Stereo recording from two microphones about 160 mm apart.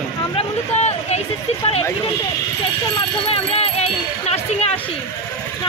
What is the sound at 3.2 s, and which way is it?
Speech, 40° left (ahead or behind).